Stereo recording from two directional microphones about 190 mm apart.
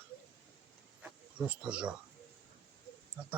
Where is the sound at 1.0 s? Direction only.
5° right (ahead or behind).